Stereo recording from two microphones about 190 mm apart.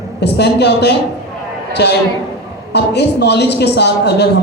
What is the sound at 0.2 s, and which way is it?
A woman's voice, 60° left (ahead or behind).